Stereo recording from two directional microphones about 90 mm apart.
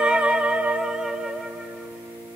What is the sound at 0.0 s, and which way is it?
Music, 10° right (ahead or behind).